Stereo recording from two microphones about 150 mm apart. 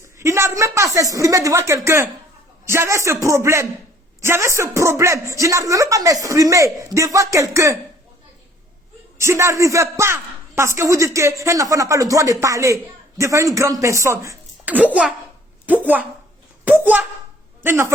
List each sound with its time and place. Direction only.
0.2 s a man's voice: 20° right (ahead or behind)
9.1 s a man's voice: 20° right (ahead or behind)